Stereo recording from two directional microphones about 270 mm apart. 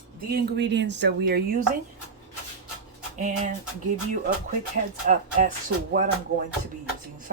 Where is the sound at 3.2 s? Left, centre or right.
Right.